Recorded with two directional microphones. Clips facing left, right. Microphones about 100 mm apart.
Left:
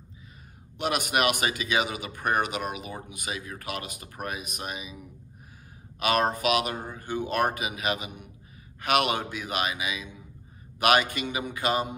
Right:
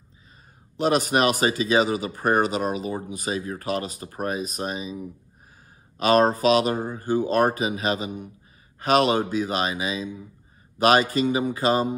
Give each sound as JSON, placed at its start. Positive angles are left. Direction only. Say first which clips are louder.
{"t": 0.7, "sound": "speech", "louder": "right 6 dB", "side_deg": -35}